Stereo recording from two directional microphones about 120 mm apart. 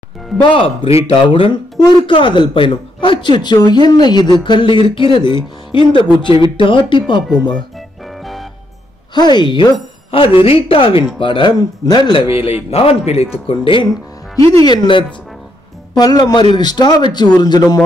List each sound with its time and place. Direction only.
0.4 s speech: 45° left (ahead or behind)
8.1 s organ: centre (ahead or behind)
9.1 s speech: 35° left (ahead or behind)
12.7 s speech: 55° left (ahead or behind)
13.5 s speech: 50° left (ahead or behind)
14.4 s speech: 50° right (ahead or behind)
14.7 s speech: 40° left (ahead or behind)